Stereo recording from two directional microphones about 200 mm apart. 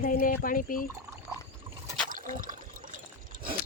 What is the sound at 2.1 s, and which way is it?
Water, 40° right (ahead or behind).